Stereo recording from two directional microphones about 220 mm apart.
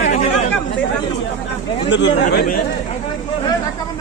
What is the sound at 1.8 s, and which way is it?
Speech, 55° left (ahead or behind).